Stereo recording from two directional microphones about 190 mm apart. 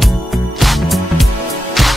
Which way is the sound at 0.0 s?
Centre (ahead or behind).